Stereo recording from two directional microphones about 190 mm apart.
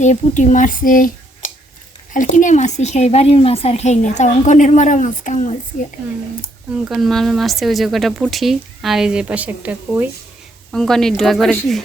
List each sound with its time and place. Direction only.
0.0 s a woman's voice: 40° left (ahead or behind)
6.8 s speech: centre (ahead or behind)
10.7 s speech: centre (ahead or behind)